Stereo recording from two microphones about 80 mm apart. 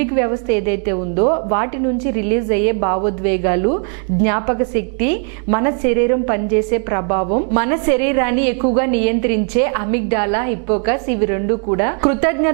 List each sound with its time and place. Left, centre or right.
0.0 s a woman's voice: centre